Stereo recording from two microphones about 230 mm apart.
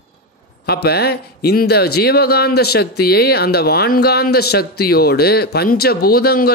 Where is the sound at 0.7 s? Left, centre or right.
Left.